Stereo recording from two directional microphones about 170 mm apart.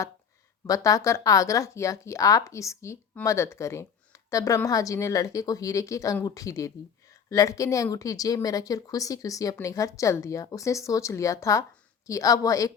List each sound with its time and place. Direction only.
0.7 s speech: 20° left (ahead or behind)